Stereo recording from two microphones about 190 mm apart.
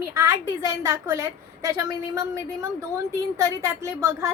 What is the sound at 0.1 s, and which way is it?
A woman's voice, 15° right (ahead or behind).